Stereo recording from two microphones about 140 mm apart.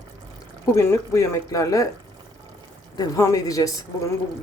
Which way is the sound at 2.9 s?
25° left (ahead or behind).